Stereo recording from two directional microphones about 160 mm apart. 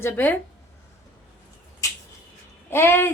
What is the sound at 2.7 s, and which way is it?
Speech, 15° left (ahead or behind).